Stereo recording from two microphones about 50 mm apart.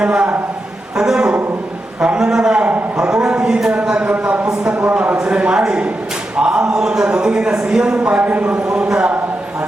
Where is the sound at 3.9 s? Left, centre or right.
Right.